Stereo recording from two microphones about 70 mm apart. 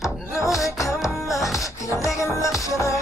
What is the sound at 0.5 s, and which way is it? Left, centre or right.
Music, left.